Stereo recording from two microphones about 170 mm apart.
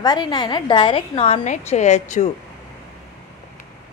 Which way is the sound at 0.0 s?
25° left (ahead or behind).